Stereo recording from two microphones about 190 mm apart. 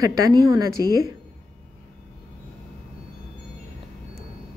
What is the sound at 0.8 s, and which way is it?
Speech, 15° left (ahead or behind).